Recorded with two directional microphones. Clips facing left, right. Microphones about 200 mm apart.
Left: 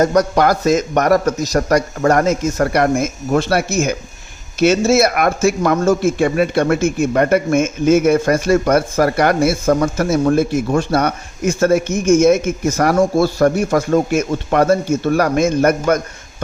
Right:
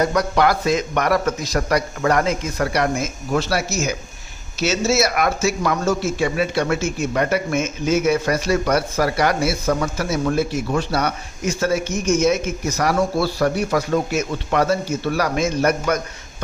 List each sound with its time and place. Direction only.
0.0 s speech: 45° left (ahead or behind)